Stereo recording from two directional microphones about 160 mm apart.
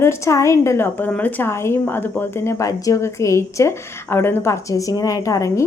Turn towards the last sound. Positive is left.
turn(degrees=20)  # may be behind; listen again after turning